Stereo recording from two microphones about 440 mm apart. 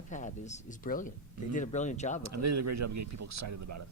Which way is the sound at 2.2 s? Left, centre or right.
Right.